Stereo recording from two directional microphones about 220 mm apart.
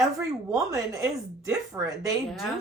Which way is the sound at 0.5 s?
15° right (ahead or behind).